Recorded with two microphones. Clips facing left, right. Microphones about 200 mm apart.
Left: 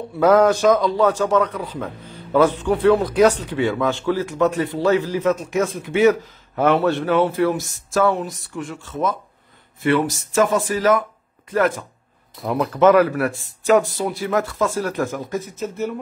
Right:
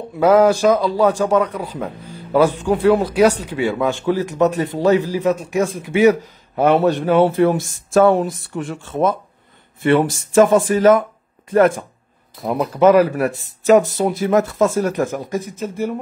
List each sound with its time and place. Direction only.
0.2 s a man's voice: 10° right (ahead or behind); by 11.0 s 25° right (ahead or behind)
12.4 s a man's voice: 20° right (ahead or behind)